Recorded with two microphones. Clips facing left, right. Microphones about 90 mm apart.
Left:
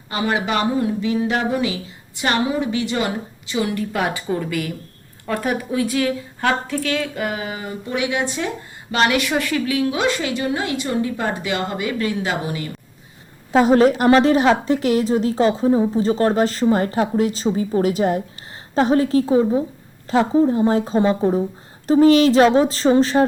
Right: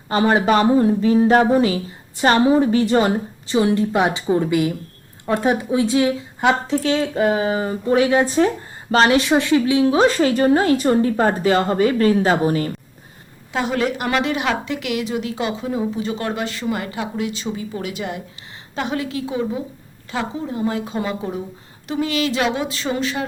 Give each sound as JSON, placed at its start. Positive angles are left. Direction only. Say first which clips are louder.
{"t": 0.1, "sound": "speech", "louder": "right 5 dB", "side_deg": -35}
{"t": 13.5, "sound": "a woman's voice", "louder": "left 8 dB", "side_deg": 40}